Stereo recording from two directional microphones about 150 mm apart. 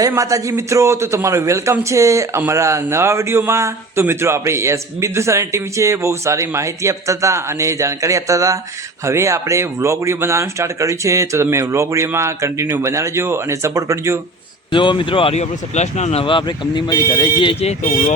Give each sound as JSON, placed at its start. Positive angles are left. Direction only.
{"t": 0.0, "sound": "a man's voice", "side_deg": -20}
{"t": 14.7, "sound": "speech", "side_deg": 35}
{"t": 16.2, "sound": "speech", "side_deg": 35}